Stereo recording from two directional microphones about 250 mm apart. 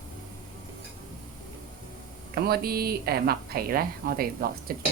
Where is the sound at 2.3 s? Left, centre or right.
Right.